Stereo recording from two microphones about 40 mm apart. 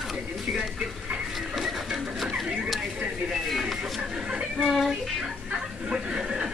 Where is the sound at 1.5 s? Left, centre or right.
Centre.